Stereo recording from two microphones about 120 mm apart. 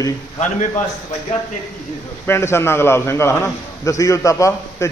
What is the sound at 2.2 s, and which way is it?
A man's voice, 20° left (ahead or behind).